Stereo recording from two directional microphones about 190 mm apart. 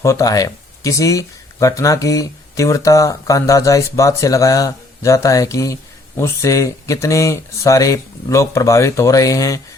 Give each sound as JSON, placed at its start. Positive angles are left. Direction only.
{"t": 0.0, "sound": "speech", "side_deg": 15}